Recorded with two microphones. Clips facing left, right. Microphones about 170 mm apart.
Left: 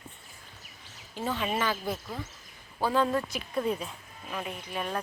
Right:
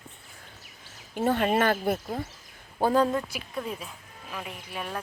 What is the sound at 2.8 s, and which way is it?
Speech, 40° right (ahead or behind).